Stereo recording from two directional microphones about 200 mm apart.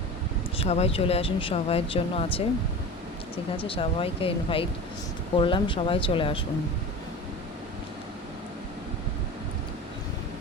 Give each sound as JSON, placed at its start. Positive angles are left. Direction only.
{"t": 0.6, "sound": "speech", "side_deg": 30}
{"t": 3.7, "sound": "speech", "side_deg": 25}